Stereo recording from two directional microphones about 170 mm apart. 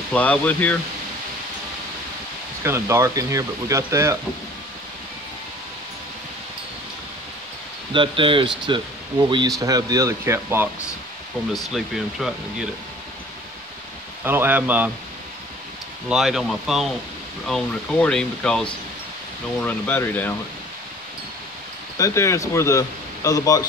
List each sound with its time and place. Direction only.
0.1 s speech: 10° left (ahead or behind)
2.6 s speech: 15° right (ahead or behind)
7.9 s speech: 30° right (ahead or behind)
11.5 s speech: centre (ahead or behind)
14.2 s speech: 10° right (ahead or behind)
16.1 s speech: centre (ahead or behind)
21.9 s speech: 20° left (ahead or behind)